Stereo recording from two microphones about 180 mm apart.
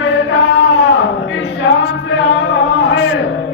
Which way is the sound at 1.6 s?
80° left.